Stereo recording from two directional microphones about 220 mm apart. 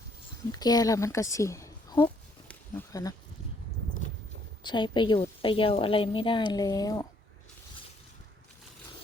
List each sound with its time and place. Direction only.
0.5 s speech: 15° left (ahead or behind)
2.5 s a sound: 10° left (ahead or behind)
4.6 s a woman's voice: 20° left (ahead or behind)